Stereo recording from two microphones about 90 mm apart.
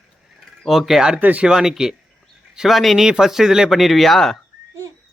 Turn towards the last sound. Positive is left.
turn(degrees=5)  # may be behind; listen again after turning